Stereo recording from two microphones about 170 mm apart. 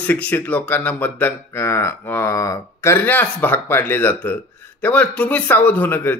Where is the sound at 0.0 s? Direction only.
10° left (ahead or behind).